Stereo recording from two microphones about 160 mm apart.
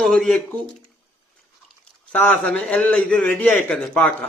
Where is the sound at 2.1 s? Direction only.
10° left (ahead or behind).